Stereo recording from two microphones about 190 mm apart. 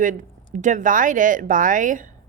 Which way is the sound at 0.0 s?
45° right (ahead or behind).